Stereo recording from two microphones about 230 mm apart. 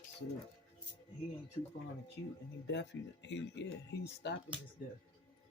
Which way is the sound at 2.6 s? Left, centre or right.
Left.